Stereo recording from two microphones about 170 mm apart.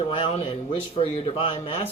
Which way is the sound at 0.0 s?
35° left (ahead or behind).